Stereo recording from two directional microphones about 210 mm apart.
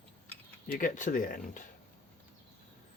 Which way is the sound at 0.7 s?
40° left (ahead or behind).